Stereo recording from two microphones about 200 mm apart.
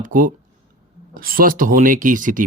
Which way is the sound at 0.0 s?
40° right (ahead or behind).